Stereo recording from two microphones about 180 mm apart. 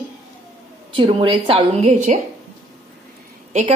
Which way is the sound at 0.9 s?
30° right (ahead or behind).